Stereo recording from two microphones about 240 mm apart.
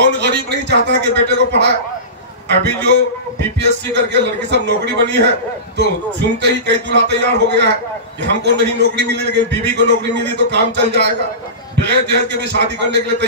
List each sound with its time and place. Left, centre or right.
0.0 s speech: right